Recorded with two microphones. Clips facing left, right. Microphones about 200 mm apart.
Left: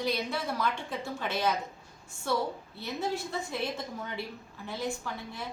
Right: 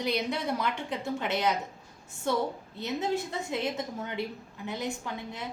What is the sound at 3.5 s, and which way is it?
A woman's voice, 20° right (ahead or behind).